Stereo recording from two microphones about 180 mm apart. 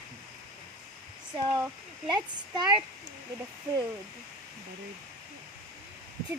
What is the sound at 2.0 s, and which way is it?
Speech, 25° right (ahead or behind).